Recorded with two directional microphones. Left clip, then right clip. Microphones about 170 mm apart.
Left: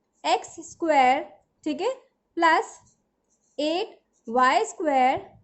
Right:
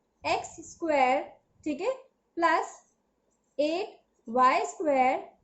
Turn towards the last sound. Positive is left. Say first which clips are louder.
# left 3 dB
turn(degrees=55)  # may be behind; listen again after turning